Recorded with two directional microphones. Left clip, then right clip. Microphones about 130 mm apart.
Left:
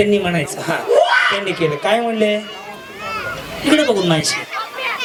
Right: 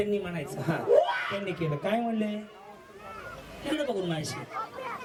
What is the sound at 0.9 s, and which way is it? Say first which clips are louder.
A child's voice: left 13 dB; 15° left (ahead or behind).